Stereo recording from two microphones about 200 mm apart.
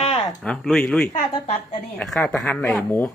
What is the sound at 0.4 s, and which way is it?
Speech, 5° left (ahead or behind).